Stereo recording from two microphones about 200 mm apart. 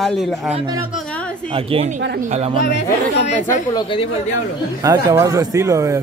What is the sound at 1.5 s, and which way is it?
Speech, 30° right (ahead or behind).